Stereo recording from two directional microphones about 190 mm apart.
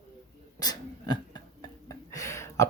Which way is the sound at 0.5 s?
20° left (ahead or behind).